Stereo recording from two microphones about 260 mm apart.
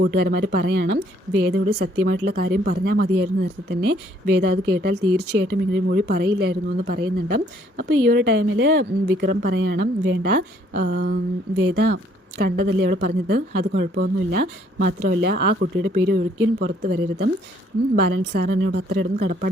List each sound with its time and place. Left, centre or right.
0.0 s speech: right